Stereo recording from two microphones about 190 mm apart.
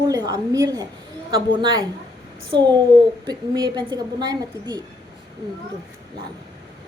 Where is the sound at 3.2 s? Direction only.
20° right (ahead or behind).